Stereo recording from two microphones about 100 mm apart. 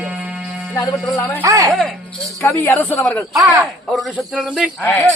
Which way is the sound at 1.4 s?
30° right (ahead or behind).